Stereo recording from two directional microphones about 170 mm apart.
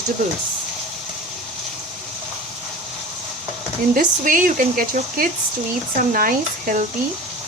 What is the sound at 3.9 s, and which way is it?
Speech, 55° right (ahead or behind).